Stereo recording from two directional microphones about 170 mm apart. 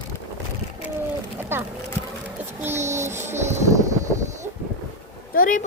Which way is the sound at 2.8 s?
15° right (ahead or behind).